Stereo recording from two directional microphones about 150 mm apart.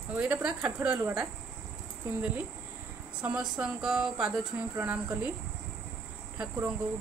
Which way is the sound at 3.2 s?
10° right (ahead or behind).